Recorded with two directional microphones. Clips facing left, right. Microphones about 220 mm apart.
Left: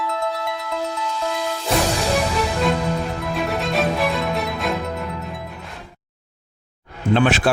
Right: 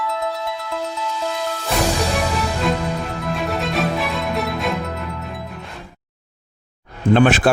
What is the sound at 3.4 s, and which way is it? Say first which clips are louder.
Music: even; centre (ahead or behind).